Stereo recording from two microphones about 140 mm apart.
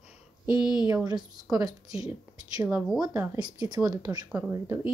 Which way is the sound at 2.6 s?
5° right (ahead or behind).